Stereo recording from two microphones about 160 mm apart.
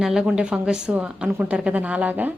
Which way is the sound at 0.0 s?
5° right (ahead or behind).